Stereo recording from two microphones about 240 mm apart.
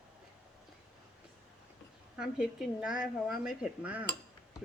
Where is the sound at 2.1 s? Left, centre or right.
Centre.